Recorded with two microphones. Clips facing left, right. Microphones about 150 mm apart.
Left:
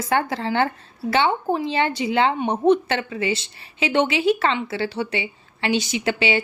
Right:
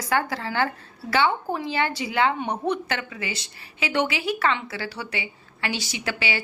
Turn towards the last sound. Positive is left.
turn(degrees=20)  # may be behind; listen again after turning